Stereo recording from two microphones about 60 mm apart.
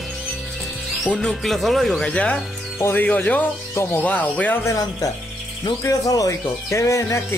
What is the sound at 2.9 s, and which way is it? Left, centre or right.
Speech, left.